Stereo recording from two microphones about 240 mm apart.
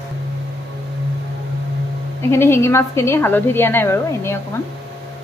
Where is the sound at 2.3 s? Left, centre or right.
Centre.